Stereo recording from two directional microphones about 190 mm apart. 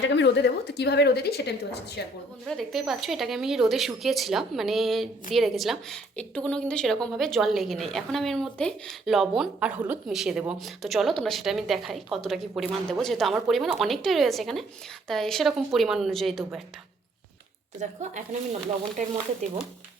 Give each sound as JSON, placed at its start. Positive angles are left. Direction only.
{"t": 0.0, "sound": "a woman's voice", "side_deg": 65}
{"t": 2.5, "sound": "speech", "side_deg": 0}
{"t": 17.7, "sound": "a woman's voice", "side_deg": -40}